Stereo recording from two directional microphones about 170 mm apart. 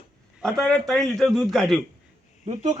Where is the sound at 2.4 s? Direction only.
45° right (ahead or behind).